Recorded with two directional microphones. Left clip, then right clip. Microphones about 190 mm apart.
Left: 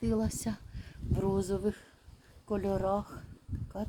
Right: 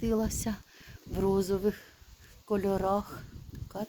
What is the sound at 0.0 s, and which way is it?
Speech, 10° right (ahead or behind).